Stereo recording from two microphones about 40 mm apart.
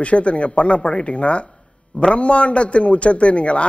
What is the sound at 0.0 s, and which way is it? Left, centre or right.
A man's voice, left.